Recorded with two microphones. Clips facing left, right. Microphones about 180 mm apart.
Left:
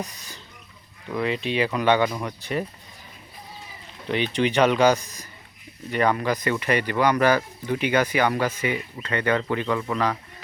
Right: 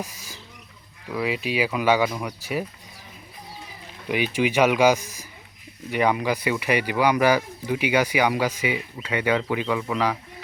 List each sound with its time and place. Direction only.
1.0 s speech: 5° right (ahead or behind)
4.1 s speech: 10° right (ahead or behind)